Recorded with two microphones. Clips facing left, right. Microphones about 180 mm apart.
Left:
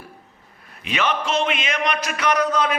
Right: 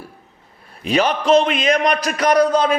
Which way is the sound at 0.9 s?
35° right (ahead or behind).